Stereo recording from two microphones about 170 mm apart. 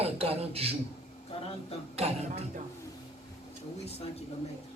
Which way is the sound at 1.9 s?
35° right (ahead or behind).